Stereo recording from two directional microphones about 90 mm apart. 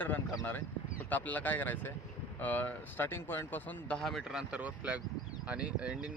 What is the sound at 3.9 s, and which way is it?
Speech, centre (ahead or behind).